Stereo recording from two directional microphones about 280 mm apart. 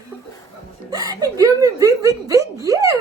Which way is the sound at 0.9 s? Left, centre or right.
Centre.